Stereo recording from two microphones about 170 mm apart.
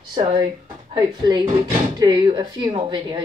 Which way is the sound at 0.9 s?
25° right (ahead or behind).